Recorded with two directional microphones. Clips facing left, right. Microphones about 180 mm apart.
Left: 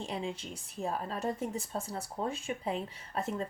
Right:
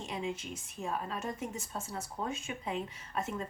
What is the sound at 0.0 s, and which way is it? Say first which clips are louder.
Speech: left 1 dB; 35° left (ahead or behind).